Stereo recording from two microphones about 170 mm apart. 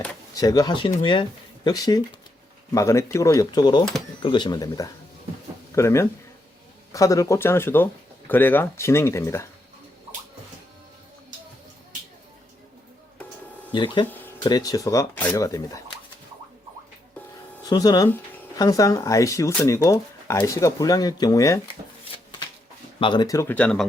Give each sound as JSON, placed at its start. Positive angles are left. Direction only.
{"t": 0.3, "sound": "speech", "side_deg": 20}
{"t": 13.7, "sound": "speech", "side_deg": 30}
{"t": 17.7, "sound": "speech", "side_deg": 25}
{"t": 23.0, "sound": "speech", "side_deg": 25}